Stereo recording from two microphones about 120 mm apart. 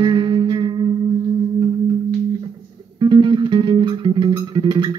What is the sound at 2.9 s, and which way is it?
Music, 40° right (ahead or behind).